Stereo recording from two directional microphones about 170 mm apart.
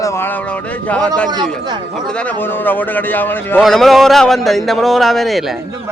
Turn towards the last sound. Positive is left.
turn(degrees=0)  # may be behind; listen again after turning